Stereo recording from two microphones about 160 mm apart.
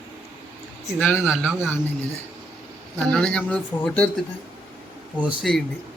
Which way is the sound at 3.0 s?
5° left (ahead or behind).